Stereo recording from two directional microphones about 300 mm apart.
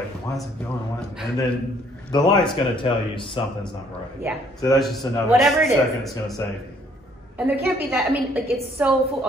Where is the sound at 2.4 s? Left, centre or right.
Centre.